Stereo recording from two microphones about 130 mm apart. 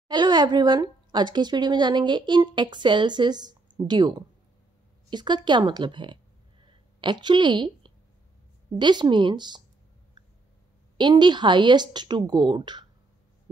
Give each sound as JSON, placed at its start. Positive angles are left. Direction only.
{"t": 0.1, "sound": "speech", "side_deg": -35}
{"t": 5.1, "sound": "speech", "side_deg": -35}
{"t": 6.7, "sound": "a sound", "side_deg": -35}
{"t": 8.7, "sound": "speech", "side_deg": -35}
{"t": 11.0, "sound": "speech", "side_deg": -35}